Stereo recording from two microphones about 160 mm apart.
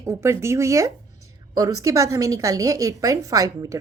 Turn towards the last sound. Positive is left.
turn(degrees=-20)  # may be behind; listen again after turning